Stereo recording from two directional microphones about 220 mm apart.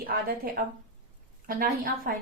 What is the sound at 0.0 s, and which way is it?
A woman's voice, 40° right (ahead or behind).